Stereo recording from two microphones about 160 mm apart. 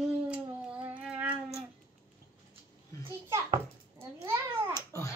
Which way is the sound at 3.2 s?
20° right (ahead or behind).